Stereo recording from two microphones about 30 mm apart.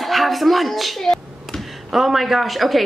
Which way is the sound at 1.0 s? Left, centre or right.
Centre.